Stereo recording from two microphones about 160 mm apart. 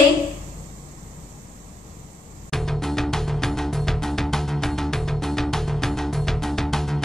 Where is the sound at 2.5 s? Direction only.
Centre (ahead or behind).